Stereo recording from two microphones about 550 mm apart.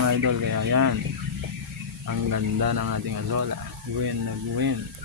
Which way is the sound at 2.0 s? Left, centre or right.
Right.